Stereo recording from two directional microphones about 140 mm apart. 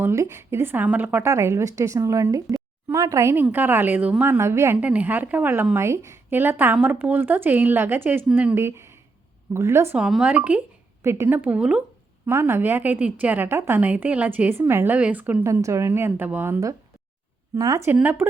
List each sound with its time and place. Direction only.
0.0 s a woman's voice: 20° right (ahead or behind)
10.0 s a woman's voice: 5° right (ahead or behind)